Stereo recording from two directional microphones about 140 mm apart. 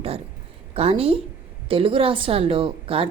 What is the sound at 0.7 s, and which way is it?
A woman's voice, 45° right (ahead or behind).